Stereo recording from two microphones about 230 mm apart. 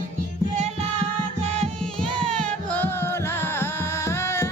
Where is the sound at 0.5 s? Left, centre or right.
Right.